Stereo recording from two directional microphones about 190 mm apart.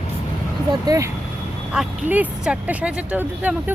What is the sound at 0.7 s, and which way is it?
Speech, 20° right (ahead or behind).